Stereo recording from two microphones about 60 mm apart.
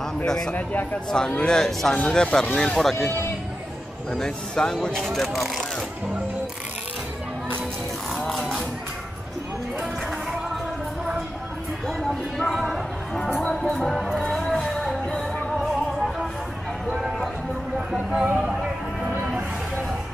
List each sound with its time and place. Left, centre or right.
0.3 s speech: centre
2.0 s speech: left
2.5 s speech: centre
4.1 s speech: centre
5.1 s speech: centre
8.2 s speech: centre
12.6 s speech: centre
13.7 s music: centre
16.9 s a sound: centre
17.9 s a sound: right